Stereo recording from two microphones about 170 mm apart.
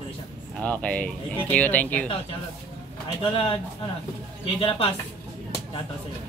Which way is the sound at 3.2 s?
30° left (ahead or behind).